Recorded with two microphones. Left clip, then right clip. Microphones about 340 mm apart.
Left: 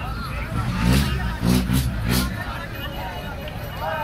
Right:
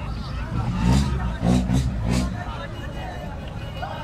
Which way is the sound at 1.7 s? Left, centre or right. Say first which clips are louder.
Left 2 dB; right.